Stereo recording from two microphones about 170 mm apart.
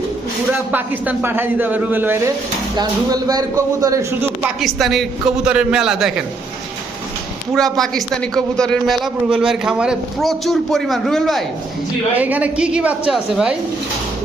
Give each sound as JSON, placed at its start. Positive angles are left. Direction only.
{"t": 0.7, "sound": "speech", "side_deg": -10}
{"t": 4.4, "sound": "a man's voice", "side_deg": 0}
{"t": 7.5, "sound": "a man's voice", "side_deg": 0}
{"t": 12.1, "sound": "speech", "side_deg": -10}